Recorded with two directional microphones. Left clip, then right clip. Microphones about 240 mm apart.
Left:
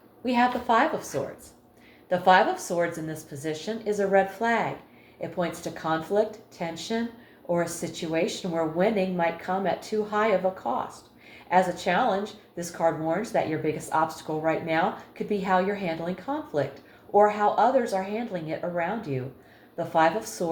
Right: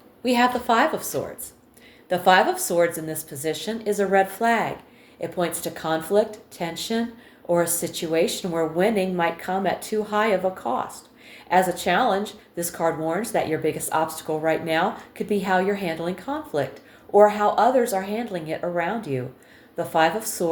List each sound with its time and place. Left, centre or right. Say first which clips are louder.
0.2 s speech: right 3 dB; right